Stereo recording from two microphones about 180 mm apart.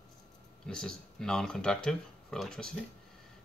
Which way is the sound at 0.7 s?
5° left (ahead or behind).